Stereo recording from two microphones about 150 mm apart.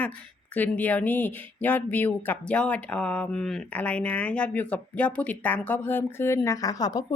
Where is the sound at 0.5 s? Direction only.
10° left (ahead or behind).